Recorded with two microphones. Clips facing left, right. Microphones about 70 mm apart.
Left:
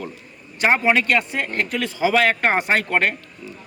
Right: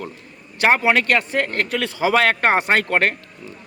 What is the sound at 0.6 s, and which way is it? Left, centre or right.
Speech, right.